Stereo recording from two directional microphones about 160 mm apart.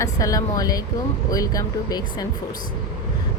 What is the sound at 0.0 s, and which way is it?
A woman's voice, 20° left (ahead or behind).